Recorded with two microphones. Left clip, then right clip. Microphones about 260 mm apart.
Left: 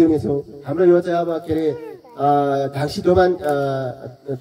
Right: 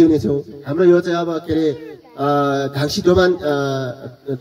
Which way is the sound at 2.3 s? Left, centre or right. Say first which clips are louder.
Even; right.